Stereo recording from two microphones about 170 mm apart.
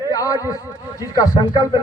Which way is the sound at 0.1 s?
20° left (ahead or behind).